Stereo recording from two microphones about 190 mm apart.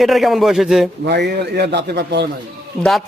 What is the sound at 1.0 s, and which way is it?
A man's voice, 60° right (ahead or behind).